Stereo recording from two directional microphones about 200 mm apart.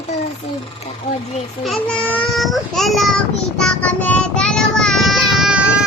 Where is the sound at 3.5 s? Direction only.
5° left (ahead or behind).